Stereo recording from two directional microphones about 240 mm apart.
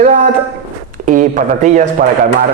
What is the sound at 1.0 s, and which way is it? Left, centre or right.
Speech, right.